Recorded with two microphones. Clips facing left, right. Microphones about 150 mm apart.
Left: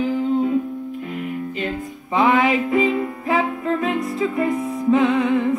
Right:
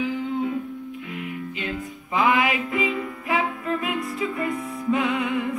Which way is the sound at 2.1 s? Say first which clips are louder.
Left 5 dB; 35° left (ahead or behind).